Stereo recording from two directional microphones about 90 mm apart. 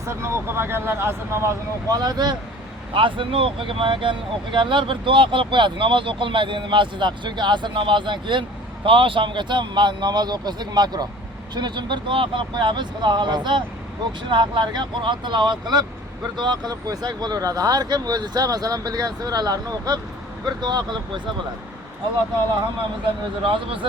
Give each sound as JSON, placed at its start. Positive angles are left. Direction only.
{"t": 0.0, "sound": "speech", "side_deg": -30}
{"t": 1.9, "sound": "speech", "side_deg": -45}
{"t": 2.9, "sound": "speech", "side_deg": -70}
{"t": 23.4, "sound": "speech", "side_deg": -70}